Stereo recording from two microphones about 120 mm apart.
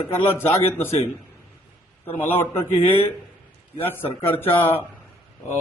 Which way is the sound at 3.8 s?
15° left (ahead or behind).